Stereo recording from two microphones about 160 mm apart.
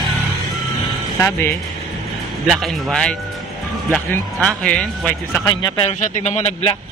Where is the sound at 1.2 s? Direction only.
15° left (ahead or behind).